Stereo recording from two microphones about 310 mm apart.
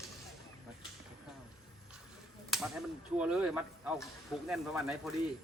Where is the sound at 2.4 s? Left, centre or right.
Centre.